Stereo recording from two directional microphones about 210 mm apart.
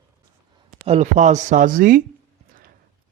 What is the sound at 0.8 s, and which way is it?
Speech, 30° right (ahead or behind).